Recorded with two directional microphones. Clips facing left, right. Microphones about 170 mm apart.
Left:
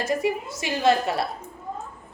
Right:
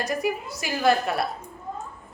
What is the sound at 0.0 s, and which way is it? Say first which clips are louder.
A woman's voice: left 2 dB; 25° left (ahead or behind).